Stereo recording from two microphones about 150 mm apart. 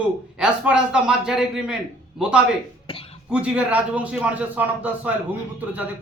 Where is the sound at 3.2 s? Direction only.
5° right (ahead or behind).